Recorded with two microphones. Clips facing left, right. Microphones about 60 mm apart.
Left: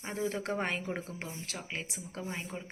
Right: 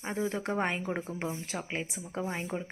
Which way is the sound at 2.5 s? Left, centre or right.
Centre.